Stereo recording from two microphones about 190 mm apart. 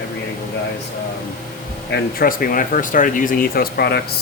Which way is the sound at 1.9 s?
50° left (ahead or behind).